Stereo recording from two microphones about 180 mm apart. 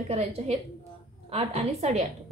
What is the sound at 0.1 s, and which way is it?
A woman's voice, 35° right (ahead or behind).